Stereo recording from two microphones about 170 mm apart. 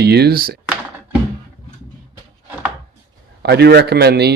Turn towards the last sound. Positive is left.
turn(degrees=-75)  # may be behind; listen again after turning